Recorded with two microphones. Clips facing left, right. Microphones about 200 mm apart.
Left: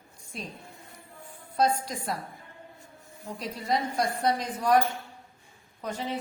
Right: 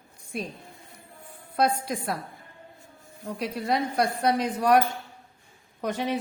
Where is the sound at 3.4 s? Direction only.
65° right (ahead or behind).